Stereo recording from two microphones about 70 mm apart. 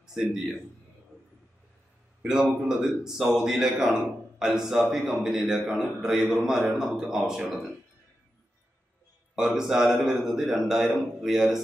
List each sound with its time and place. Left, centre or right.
0.0 s a man's voice: centre
2.6 s a man's voice: centre
9.3 s a man's voice: centre